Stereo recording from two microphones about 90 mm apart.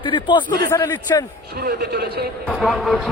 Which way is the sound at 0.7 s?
30° left (ahead or behind).